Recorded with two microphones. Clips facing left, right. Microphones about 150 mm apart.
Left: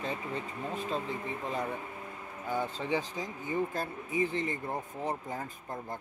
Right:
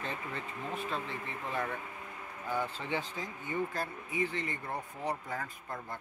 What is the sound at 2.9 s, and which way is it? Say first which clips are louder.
Speech: left 4 dB; 15° left (ahead or behind).